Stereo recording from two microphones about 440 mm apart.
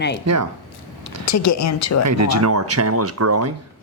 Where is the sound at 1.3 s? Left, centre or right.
Left.